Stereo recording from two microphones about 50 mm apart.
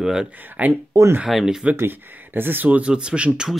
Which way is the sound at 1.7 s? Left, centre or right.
Right.